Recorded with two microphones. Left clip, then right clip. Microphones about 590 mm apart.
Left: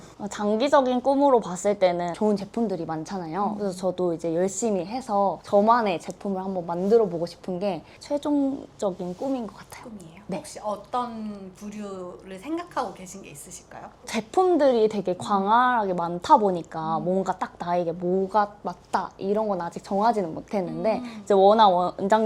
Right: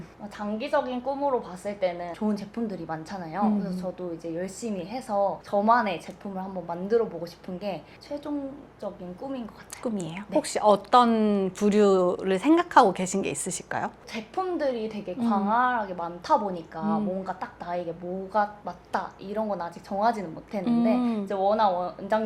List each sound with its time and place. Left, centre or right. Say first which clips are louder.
0.3 s a woman's voice: left 8 dB; left
10.4 s speech: right 12 dB; right
14.1 s a woman's voice: left 12 dB; left